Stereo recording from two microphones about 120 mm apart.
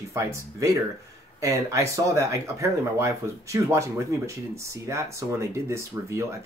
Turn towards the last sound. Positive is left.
turn(degrees=-20)  # may be behind; listen again after turning